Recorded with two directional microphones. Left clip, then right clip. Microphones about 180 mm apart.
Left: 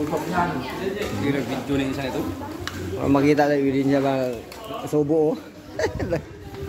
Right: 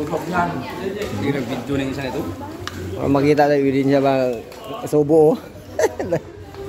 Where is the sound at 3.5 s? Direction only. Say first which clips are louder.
Right 4 dB; 25° right (ahead or behind).